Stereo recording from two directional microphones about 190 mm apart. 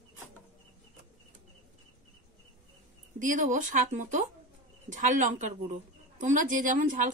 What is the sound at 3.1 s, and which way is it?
A woman's voice, 45° right (ahead or behind).